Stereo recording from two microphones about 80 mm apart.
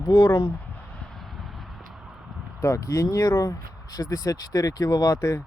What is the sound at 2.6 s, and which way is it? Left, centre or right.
Speech, left.